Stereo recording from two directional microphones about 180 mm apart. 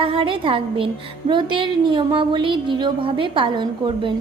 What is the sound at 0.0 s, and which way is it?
A woman's voice, 30° right (ahead or behind).